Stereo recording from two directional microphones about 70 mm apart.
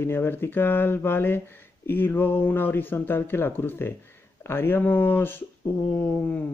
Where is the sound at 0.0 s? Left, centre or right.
Left.